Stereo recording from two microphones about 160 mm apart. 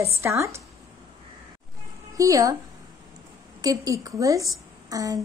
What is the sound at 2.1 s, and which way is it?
Speech, 20° right (ahead or behind).